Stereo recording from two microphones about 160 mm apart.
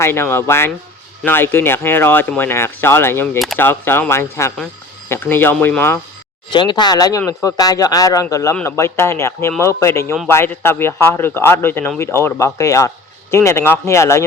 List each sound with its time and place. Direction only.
0.0 s speech: 15° left (ahead or behind)
6.5 s speech: 30° left (ahead or behind)